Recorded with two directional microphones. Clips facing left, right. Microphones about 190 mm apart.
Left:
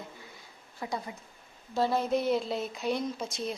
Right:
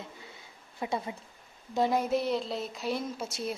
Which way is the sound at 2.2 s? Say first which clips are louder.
Left 2 dB; centre (ahead or behind).